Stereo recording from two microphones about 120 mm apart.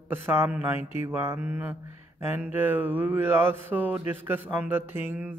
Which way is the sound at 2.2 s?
20° right (ahead or behind).